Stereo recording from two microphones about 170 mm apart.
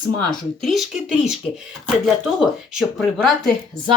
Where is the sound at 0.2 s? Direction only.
Centre (ahead or behind).